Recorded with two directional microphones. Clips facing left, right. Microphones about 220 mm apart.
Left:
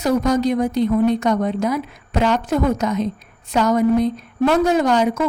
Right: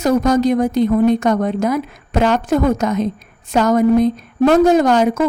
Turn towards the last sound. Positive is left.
turn(degrees=-50)  # may be behind; listen again after turning